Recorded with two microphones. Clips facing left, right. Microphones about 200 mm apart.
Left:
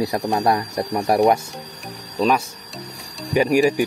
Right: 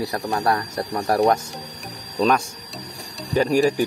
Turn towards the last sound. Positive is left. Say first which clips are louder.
# left 2 dB
turn(degrees=10)  # may be behind; listen again after turning